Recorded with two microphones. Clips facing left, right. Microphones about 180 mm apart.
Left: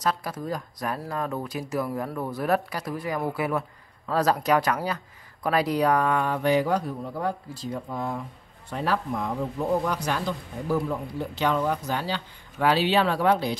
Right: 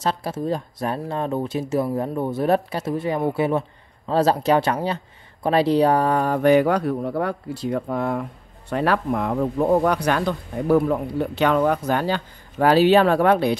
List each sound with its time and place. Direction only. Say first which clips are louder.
0.0 s speech: right 4 dB; 25° right (ahead or behind); by 13.6 s 60° right (ahead or behind)